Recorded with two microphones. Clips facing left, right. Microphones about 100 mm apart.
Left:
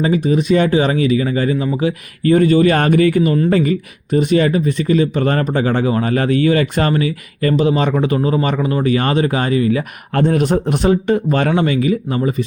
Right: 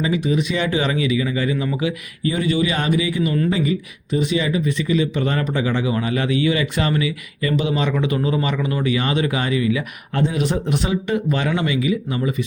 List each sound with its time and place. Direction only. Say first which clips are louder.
0.0 s speech: left 5 dB; 45° left (ahead or behind)
2.2 s speech: left 9 dB; 50° left (ahead or behind)
10.2 s speech: left 6 dB; 50° left (ahead or behind)